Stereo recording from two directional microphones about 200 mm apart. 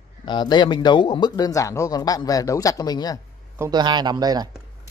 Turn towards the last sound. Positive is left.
turn(degrees=-20)  # may be behind; listen again after turning